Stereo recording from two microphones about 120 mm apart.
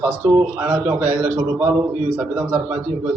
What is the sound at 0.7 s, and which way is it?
A man's voice, 10° right (ahead or behind).